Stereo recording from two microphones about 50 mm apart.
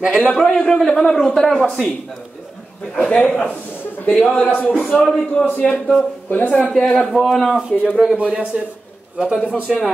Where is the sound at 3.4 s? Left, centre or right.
Left.